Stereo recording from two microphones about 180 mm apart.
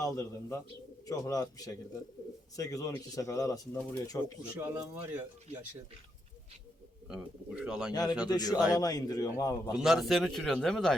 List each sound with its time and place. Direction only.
0.0 s speech: 20° left (ahead or behind)
4.6 s speech: 10° right (ahead or behind)
7.1 s a man's voice: 5° right (ahead or behind)
8.3 s speech: 20° left (ahead or behind)
9.7 s a man's voice: centre (ahead or behind)